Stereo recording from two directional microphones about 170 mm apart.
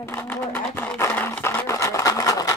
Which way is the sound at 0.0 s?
15° left (ahead or behind).